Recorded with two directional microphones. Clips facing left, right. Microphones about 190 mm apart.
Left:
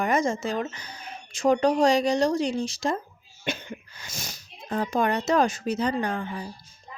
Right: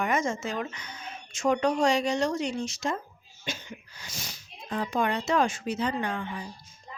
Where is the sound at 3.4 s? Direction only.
55° left (ahead or behind); by 6.5 s 40° left (ahead or behind).